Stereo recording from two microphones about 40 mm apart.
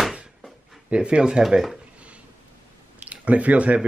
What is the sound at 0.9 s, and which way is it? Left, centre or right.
Speech, right.